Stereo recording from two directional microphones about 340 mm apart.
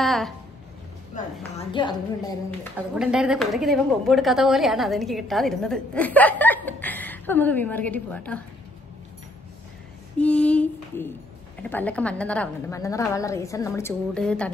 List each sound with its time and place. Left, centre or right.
0.0 s music: centre
1.1 s a sound: left
1.7 s a woman's voice: centre
2.9 s a woman's voice: centre
10.1 s a woman's voice: centre